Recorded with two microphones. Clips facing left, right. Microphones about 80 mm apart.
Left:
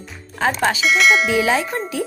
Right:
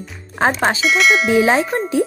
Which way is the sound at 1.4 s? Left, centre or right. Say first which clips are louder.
Right 4 dB; right.